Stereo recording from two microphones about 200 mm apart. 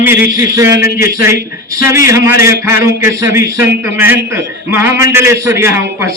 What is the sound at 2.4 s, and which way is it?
A man's voice, 15° right (ahead or behind).